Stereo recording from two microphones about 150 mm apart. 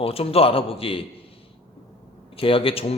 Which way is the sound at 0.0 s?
40° left (ahead or behind).